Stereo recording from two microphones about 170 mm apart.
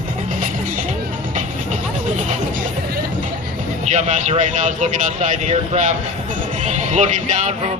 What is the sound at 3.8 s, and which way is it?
Speech, 45° right (ahead or behind).